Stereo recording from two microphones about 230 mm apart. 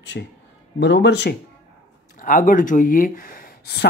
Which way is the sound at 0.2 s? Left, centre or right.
Left.